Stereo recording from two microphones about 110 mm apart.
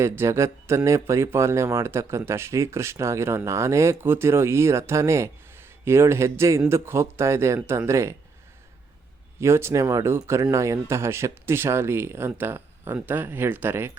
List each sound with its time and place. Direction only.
0.0 s speech: 25° right (ahead or behind)
9.4 s speech: 25° right (ahead or behind)